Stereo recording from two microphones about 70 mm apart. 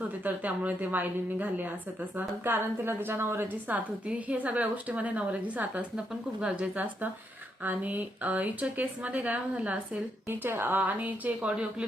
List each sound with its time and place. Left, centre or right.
0.3 s a woman's voice: right
7.6 s a woman's voice: right
10.2 s a woman's voice: right; by 11.9 s centre